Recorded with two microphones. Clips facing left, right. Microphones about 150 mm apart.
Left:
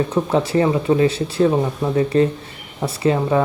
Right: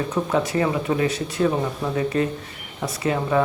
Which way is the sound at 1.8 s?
20° left (ahead or behind).